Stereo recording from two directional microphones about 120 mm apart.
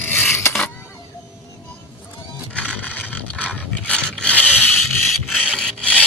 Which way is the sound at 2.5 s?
10° left (ahead or behind).